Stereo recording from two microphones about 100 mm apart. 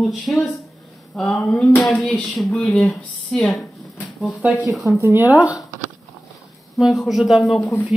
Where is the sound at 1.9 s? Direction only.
15° left (ahead or behind).